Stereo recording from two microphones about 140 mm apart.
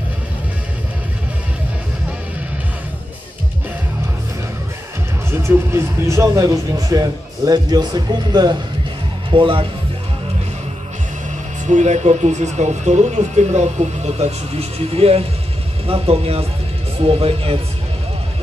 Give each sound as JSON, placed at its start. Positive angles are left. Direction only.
{"t": 5.3, "sound": "speech", "side_deg": -20}
{"t": 11.6, "sound": "speech", "side_deg": -55}